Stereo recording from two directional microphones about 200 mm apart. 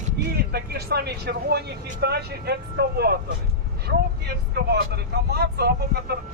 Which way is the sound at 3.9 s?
50° right (ahead or behind).